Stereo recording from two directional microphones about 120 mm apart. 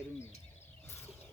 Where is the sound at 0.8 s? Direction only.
20° left (ahead or behind).